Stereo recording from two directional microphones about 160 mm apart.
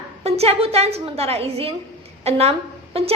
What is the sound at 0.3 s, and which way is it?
A woman's voice, 40° right (ahead or behind).